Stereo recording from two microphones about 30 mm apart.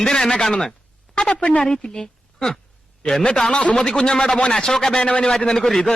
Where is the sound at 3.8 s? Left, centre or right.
Left.